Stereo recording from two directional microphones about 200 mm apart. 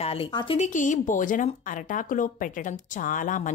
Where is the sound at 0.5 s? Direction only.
40° left (ahead or behind).